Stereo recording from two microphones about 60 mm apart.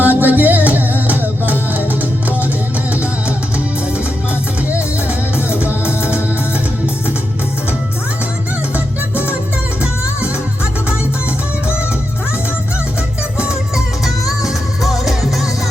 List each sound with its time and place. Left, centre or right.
0.0 s music: right
5.5 s music: right
13.4 s music: centre
14.0 s music: centre